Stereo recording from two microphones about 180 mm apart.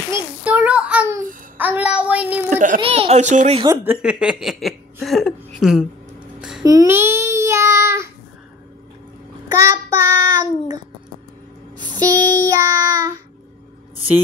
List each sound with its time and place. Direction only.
0.1 s a child's voice: 5° right (ahead or behind)
2.5 s speech: 45° right (ahead or behind)
2.8 s speech: 35° right (ahead or behind)
3.6 s a woman's voice: 10° right (ahead or behind)
6.6 s child singing: 20° right (ahead or behind)
9.6 s child singing: 15° right (ahead or behind)
11.8 s music: 25° right (ahead or behind)
12.4 s child singing: 20° right (ahead or behind)